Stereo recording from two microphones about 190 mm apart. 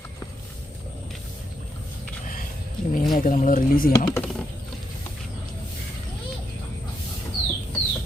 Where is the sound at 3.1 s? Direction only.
45° left (ahead or behind).